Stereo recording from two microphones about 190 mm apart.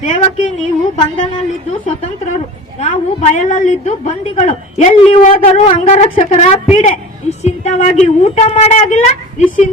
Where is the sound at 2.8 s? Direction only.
40° left (ahead or behind).